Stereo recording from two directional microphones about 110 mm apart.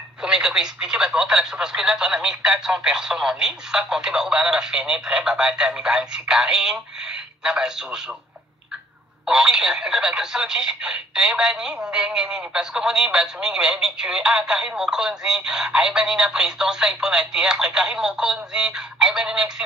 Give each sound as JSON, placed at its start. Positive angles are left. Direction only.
{"t": 0.2, "sound": "speech", "side_deg": -5}
{"t": 9.2, "sound": "speech", "side_deg": -5}